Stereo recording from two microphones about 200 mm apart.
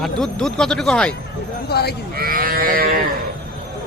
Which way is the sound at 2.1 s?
45° right (ahead or behind).